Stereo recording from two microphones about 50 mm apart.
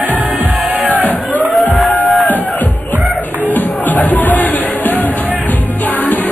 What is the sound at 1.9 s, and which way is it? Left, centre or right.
Music, left.